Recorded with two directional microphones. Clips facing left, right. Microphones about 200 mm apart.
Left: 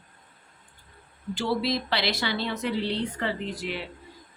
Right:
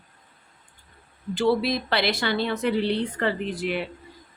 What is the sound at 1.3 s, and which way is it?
Speech, 55° right (ahead or behind).